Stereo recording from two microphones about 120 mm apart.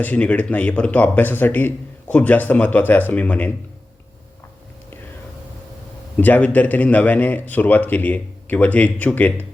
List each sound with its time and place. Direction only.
0.0 s speech: 10° left (ahead or behind)
6.1 s speech: 15° left (ahead or behind)